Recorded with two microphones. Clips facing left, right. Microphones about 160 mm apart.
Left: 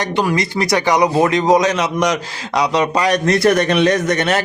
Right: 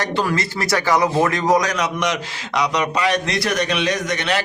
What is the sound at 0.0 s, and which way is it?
Speech, 15° left (ahead or behind).